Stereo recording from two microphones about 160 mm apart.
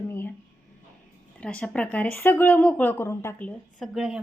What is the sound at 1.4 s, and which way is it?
Speech, 5° left (ahead or behind).